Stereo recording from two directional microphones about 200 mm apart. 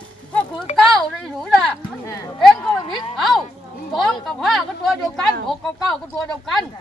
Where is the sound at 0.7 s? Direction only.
35° left (ahead or behind).